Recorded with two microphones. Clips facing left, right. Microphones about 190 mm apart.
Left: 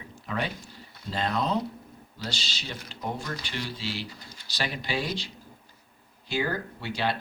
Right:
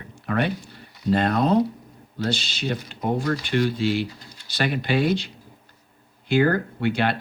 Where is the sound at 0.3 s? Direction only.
60° right (ahead or behind).